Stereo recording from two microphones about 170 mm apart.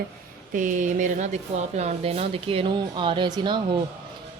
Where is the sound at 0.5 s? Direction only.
50° right (ahead or behind).